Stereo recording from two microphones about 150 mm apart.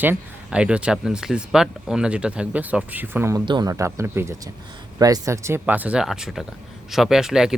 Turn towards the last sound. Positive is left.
turn(degrees=-5)  # may be behind; listen again after turning